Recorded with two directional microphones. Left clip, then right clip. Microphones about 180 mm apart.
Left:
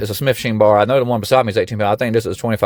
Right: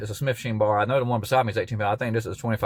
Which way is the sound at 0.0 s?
55° left (ahead or behind).